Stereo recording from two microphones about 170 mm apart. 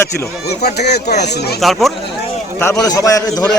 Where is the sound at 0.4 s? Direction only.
70° left (ahead or behind).